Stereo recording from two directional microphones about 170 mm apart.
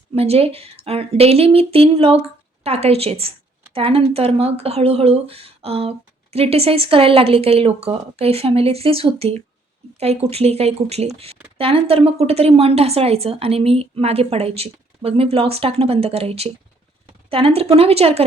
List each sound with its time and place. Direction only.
0.1 s speech: 35° right (ahead or behind)